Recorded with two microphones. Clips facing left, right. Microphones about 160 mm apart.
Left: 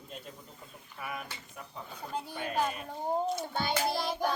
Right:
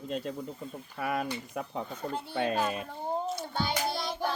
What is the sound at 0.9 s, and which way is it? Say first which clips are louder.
Speech: right 9 dB; 90° right.